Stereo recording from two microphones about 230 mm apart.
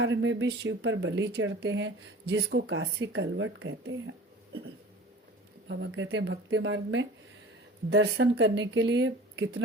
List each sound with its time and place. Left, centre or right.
0.0 s speech: right
5.6 s a woman's voice: right